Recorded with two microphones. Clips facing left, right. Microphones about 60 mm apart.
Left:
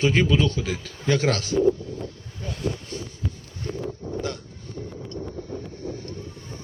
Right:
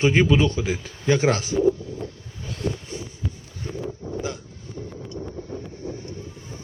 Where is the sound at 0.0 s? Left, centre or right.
Centre.